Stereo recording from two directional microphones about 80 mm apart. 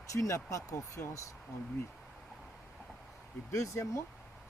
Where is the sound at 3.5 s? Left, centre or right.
Left.